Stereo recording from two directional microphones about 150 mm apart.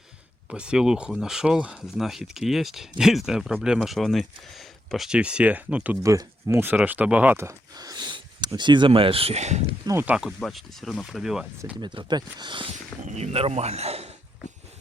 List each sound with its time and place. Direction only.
0.4 s speech: 5° right (ahead or behind)
6.0 s speech: 20° right (ahead or behind); by 9.6 s 45° right (ahead or behind)
9.8 s speech: 15° right (ahead or behind)
11.8 s speech: 30° right (ahead or behind)
12.7 s speech: 50° right (ahead or behind)